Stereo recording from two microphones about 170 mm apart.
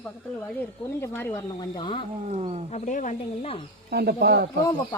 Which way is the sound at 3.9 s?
70° right (ahead or behind).